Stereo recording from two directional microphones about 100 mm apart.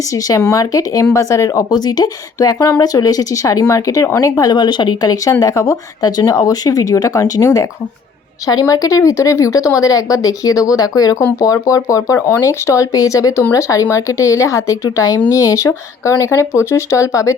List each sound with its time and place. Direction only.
0.1 s speech: 35° left (ahead or behind)